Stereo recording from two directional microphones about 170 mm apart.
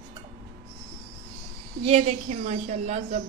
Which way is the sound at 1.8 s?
40° right (ahead or behind).